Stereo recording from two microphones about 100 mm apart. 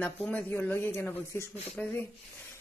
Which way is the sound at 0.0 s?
15° left (ahead or behind).